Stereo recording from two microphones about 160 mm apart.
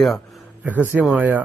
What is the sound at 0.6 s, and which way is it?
Speech, 10° right (ahead or behind).